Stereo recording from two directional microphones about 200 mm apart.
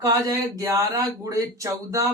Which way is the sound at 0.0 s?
15° right (ahead or behind).